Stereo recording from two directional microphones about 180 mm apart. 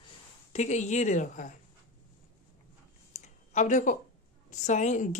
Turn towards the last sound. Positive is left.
turn(degrees=40)  # may be behind; listen again after turning